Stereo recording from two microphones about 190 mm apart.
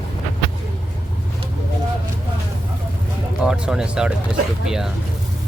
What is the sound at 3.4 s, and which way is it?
Speech, 5° right (ahead or behind).